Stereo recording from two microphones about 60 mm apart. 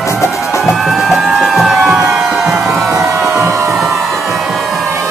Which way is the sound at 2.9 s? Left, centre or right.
Right.